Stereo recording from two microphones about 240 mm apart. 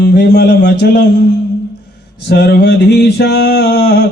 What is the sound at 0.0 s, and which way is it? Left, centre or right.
Speech, left.